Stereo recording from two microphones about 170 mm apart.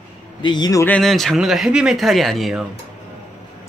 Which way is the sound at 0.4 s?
25° left (ahead or behind).